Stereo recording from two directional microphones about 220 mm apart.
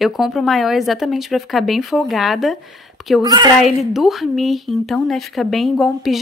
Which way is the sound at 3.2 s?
20° right (ahead or behind).